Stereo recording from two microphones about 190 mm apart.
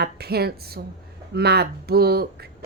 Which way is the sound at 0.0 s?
55° right (ahead or behind).